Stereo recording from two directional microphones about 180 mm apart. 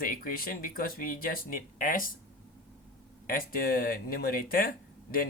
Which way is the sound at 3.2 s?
50° left (ahead or behind).